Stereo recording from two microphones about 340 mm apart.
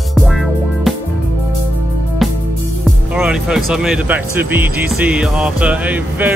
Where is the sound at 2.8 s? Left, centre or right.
Centre.